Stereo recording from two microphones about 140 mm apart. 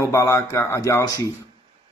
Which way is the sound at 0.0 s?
20° left (ahead or behind).